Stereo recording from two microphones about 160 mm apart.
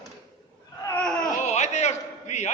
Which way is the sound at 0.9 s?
5° left (ahead or behind).